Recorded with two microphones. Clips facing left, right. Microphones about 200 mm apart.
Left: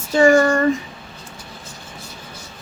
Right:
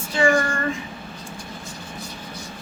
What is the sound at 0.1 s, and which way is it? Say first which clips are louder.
Speech: left 7 dB; 40° left (ahead or behind).